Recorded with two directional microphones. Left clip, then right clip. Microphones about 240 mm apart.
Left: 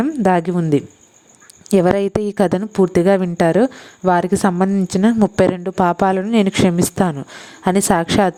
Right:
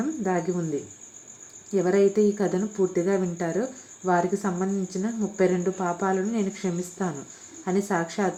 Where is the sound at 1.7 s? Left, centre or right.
Left.